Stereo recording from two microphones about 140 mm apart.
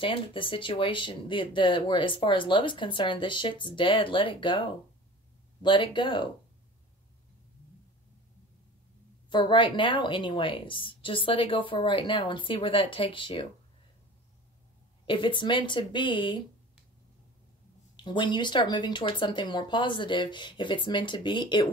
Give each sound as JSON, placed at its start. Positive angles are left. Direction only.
{"t": 0.0, "sound": "speech", "side_deg": 40}
{"t": 9.3, "sound": "speech", "side_deg": 35}
{"t": 15.0, "sound": "speech", "side_deg": 35}
{"t": 17.9, "sound": "speech", "side_deg": 35}